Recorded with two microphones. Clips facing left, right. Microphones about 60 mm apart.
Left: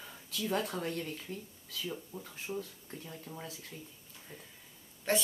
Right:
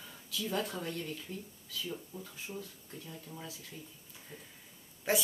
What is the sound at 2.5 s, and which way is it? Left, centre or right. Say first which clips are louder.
Speech: left 3 dB; left.